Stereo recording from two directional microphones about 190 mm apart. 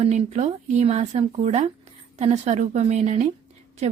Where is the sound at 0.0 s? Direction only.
35° right (ahead or behind).